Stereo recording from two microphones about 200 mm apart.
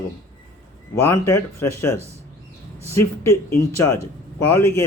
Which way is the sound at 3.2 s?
15° left (ahead or behind).